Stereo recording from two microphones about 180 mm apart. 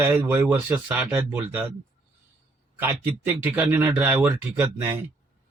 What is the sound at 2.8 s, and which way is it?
Speech, 10° right (ahead or behind).